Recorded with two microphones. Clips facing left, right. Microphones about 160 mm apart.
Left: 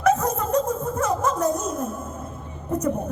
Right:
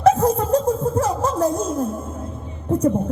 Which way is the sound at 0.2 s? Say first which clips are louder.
Right 5 dB; 30° right (ahead or behind).